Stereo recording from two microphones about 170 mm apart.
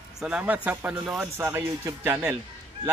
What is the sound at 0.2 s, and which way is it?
A man's voice, 5° right (ahead or behind).